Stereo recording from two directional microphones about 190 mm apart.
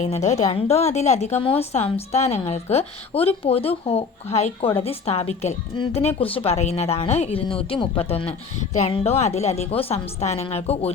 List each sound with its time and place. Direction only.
0.0 s speech: 35° left (ahead or behind)